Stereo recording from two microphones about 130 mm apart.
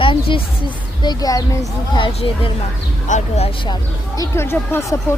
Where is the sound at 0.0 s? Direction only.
40° left (ahead or behind).